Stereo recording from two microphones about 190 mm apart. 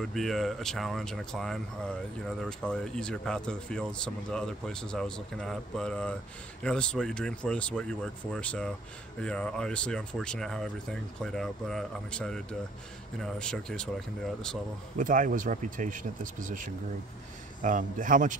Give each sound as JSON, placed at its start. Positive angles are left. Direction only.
{"t": 0.0, "sound": "speech", "side_deg": 0}
{"t": 15.0, "sound": "speech", "side_deg": -45}